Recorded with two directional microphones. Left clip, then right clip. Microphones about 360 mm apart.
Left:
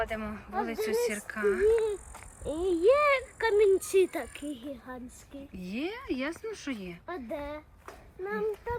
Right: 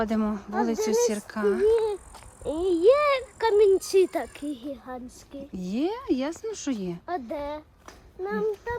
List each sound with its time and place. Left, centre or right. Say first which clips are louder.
0.0 s speech: right 6 dB; centre